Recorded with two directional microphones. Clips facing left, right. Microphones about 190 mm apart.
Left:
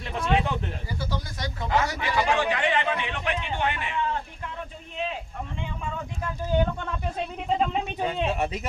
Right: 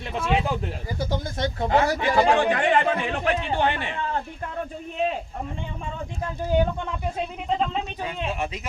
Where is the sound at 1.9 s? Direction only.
50° right (ahead or behind).